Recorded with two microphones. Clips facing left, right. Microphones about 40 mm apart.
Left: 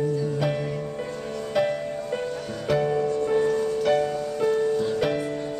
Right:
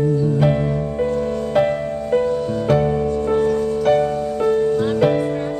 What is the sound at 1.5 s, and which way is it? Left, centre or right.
Music, centre.